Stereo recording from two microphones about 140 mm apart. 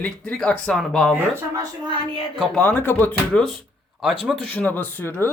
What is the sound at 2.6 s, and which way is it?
Speech, 15° left (ahead or behind).